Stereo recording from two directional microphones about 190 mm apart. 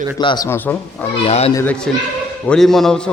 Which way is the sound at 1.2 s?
35° left (ahead or behind).